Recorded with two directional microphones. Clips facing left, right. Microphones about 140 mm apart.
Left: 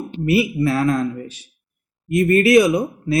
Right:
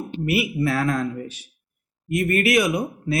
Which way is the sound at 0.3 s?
30° left (ahead or behind).